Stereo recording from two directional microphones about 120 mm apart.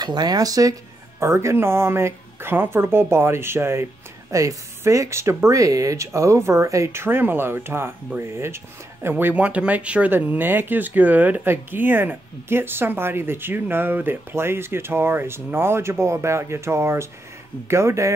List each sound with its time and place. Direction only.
0.0 s speech: 35° right (ahead or behind)